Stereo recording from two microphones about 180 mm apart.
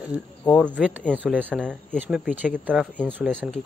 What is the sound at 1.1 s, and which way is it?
Speech, 10° right (ahead or behind).